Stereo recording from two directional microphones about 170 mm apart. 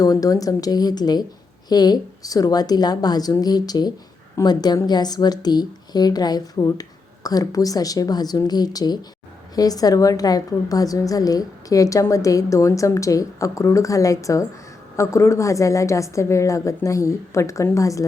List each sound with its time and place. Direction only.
0.0 s a woman's voice: 20° left (ahead or behind)